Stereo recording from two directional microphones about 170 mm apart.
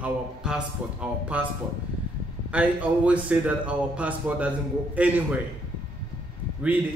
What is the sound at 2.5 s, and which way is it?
A man's voice, 10° right (ahead or behind).